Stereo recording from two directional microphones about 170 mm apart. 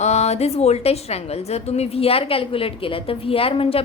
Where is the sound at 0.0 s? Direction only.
40° left (ahead or behind).